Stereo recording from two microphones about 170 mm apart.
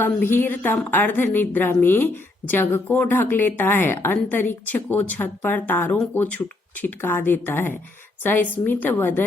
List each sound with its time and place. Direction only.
0.0 s speech: 10° left (ahead or behind)